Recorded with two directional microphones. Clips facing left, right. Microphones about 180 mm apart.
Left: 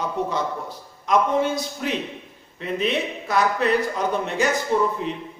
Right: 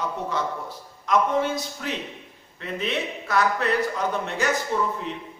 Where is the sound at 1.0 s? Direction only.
20° left (ahead or behind).